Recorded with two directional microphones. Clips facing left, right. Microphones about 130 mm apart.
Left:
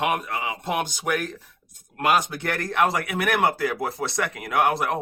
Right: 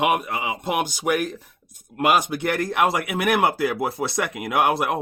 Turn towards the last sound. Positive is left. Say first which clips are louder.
# right 1 dB
turn(degrees=-10)  # may be behind; listen again after turning